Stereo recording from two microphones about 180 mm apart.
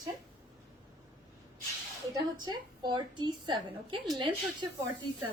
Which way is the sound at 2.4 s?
25° right (ahead or behind).